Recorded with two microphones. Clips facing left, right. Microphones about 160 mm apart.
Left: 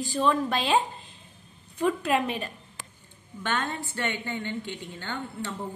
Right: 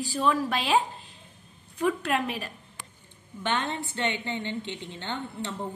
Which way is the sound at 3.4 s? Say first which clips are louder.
Right 1 dB; 20° right (ahead or behind).